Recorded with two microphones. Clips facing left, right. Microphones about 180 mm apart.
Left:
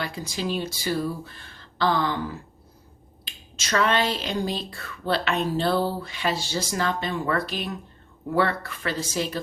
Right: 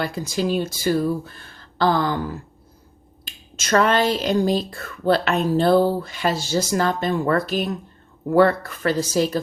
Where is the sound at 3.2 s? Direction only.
45° right (ahead or behind).